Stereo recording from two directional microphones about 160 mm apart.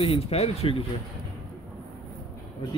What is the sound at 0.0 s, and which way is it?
Speech, 40° left (ahead or behind).